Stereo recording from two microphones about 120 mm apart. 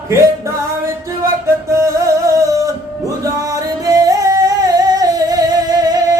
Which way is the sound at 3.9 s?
30° right (ahead or behind).